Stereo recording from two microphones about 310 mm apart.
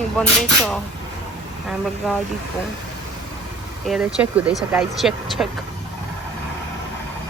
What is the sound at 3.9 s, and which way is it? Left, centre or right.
Speech, centre.